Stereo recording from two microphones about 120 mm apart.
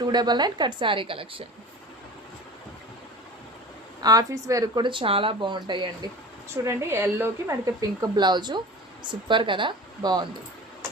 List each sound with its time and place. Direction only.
0.0 s speech: 35° right (ahead or behind)
4.0 s speech: 30° right (ahead or behind)
6.7 s a woman's voice: 20° right (ahead or behind)
7.6 s speech: 30° right (ahead or behind)